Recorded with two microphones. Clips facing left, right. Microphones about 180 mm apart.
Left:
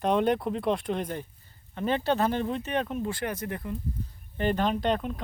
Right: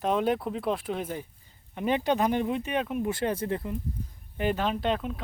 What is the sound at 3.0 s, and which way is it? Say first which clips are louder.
Speech: right 3 dB; 25° right (ahead or behind).